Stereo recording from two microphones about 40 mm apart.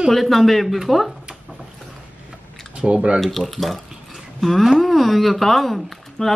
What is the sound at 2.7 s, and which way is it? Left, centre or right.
Speech, right.